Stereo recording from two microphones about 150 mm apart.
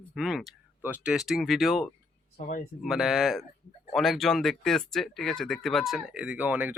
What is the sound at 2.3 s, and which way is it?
Speech, 70° left (ahead or behind).